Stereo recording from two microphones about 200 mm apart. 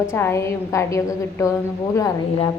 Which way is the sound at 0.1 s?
15° left (ahead or behind).